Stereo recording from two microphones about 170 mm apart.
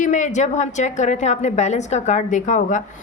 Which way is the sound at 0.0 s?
45° left (ahead or behind).